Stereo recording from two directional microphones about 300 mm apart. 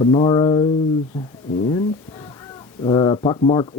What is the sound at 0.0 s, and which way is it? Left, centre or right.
Speech, centre.